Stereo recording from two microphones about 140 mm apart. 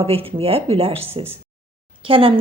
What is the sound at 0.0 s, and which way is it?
A woman's voice, 40° right (ahead or behind).